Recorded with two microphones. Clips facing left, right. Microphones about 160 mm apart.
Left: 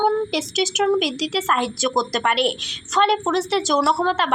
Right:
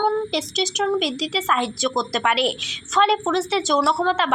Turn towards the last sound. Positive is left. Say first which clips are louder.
# even
turn(degrees=0)  # may be behind; listen again after turning